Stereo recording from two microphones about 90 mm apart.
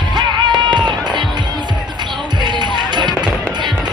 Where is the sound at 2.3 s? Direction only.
55° right (ahead or behind).